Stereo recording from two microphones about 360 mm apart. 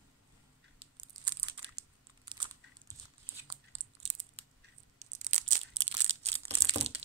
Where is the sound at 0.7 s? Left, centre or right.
Centre.